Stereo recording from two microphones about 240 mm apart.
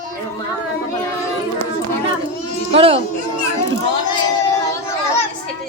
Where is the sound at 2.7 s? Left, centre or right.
Right.